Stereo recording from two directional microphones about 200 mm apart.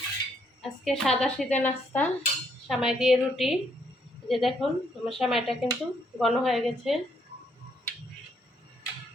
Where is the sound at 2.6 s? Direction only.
Centre (ahead or behind).